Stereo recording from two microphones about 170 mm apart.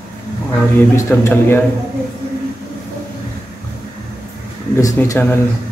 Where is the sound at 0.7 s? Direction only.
15° left (ahead or behind).